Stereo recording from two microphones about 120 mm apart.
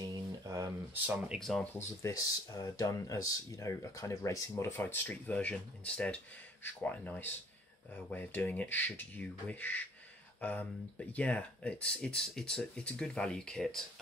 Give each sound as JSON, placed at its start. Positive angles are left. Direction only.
{"t": 0.9, "sound": "speech", "side_deg": -15}
{"t": 1.4, "sound": "speech", "side_deg": 5}
{"t": 1.8, "sound": "speech", "side_deg": 25}